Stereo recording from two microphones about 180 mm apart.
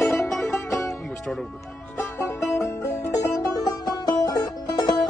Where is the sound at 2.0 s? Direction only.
15° left (ahead or behind).